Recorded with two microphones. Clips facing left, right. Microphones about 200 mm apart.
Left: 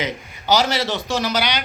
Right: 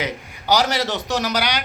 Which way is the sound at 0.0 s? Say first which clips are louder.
Left 1 dB; 15° right (ahead or behind).